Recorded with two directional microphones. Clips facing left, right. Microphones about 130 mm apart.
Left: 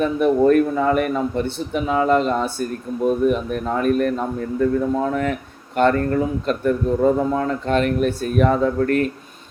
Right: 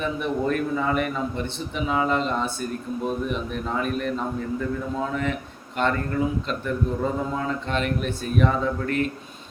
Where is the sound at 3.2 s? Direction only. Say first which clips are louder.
Left 8 dB; 50° left (ahead or behind).